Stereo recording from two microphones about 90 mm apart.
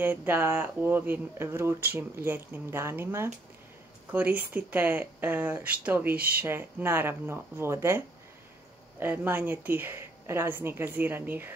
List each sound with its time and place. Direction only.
0.0 s speech: 25° right (ahead or behind)
4.1 s speech: 20° right (ahead or behind)
9.0 s speech: 25° right (ahead or behind)